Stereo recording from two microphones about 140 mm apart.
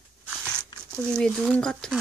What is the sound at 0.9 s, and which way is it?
Speech, 5° left (ahead or behind).